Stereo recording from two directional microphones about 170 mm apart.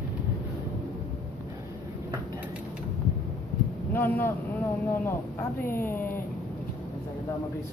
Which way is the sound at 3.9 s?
10° left (ahead or behind).